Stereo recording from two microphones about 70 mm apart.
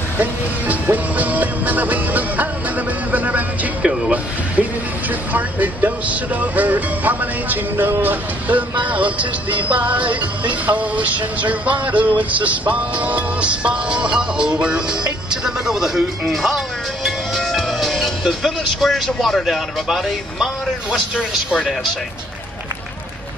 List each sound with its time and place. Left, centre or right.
0.2 s music: right
5.3 s music: right
15.4 s speech: centre